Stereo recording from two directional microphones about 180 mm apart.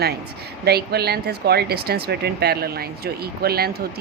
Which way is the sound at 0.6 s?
60° right (ahead or behind).